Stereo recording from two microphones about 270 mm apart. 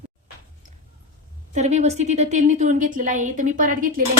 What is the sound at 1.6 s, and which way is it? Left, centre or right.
A woman's voice, right.